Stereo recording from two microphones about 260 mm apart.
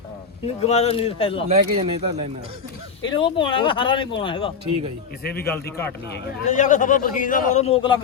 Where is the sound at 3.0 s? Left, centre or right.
Centre.